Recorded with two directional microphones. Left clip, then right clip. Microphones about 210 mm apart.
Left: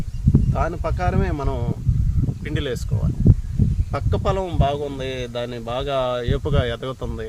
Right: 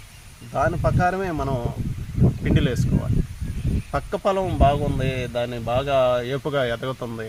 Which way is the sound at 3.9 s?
25° left (ahead or behind).